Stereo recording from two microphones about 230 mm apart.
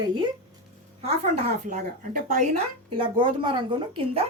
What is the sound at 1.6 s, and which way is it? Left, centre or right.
Speech, right.